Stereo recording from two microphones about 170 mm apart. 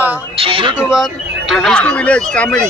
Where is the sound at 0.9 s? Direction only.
Centre (ahead or behind).